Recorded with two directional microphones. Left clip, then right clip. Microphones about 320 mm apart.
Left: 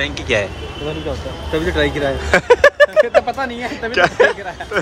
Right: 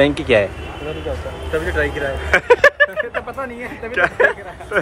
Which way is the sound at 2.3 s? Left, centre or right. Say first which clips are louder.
Left 1 dB; centre.